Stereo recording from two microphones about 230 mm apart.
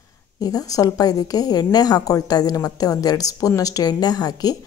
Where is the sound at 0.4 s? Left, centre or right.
Centre.